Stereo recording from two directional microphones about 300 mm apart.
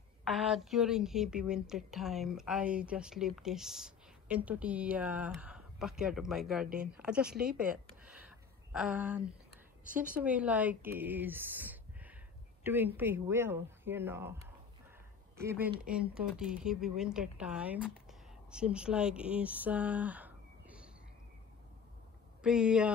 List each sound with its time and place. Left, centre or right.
0.3 s a woman's voice: centre
7.5 s a sound: centre
8.7 s a woman's voice: centre
9.5 s a sound: right
10.1 s a woman's voice: centre
22.4 s a woman's voice: centre